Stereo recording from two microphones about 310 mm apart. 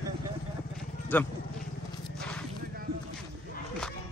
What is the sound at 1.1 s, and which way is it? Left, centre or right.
Speech, centre.